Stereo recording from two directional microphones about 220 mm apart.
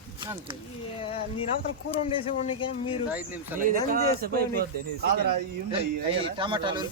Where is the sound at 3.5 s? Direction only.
10° right (ahead or behind).